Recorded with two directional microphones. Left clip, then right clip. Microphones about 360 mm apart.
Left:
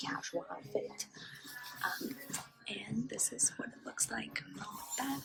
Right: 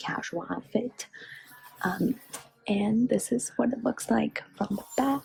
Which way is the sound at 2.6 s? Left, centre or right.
Centre.